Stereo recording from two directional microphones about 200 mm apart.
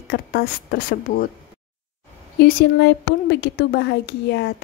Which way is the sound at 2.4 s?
55° left (ahead or behind).